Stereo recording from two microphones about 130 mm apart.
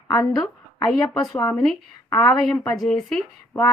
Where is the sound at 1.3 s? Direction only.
25° left (ahead or behind).